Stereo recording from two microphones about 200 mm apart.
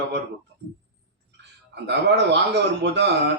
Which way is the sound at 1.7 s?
60° right (ahead or behind).